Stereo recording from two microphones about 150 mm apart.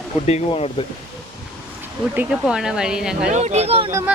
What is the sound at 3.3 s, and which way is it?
Speech, 50° right (ahead or behind).